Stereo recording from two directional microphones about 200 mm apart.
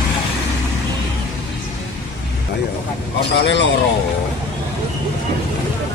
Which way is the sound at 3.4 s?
65° left (ahead or behind).